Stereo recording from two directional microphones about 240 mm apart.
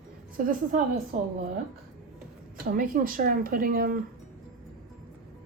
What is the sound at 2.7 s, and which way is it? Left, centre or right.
A woman's voice, right.